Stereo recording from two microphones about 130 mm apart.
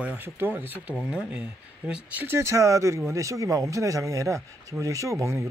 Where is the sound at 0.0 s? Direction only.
10° right (ahead or behind).